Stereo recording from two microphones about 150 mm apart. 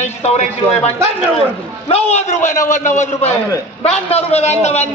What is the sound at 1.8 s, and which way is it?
A man's voice, 45° left (ahead or behind).